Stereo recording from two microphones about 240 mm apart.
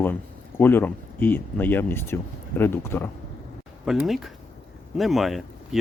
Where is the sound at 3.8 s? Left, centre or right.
Centre.